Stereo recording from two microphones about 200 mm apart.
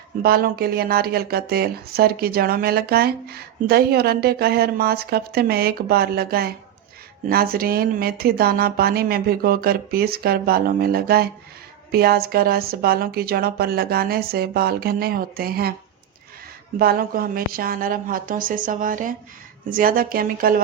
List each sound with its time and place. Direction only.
0.2 s speech: 50° right (ahead or behind)
16.7 s speech: 50° right (ahead or behind)